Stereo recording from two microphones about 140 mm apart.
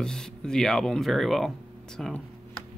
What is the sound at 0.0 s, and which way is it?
Speech, 5° left (ahead or behind).